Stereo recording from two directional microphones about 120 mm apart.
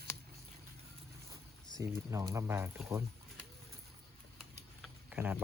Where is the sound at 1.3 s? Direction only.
30° right (ahead or behind).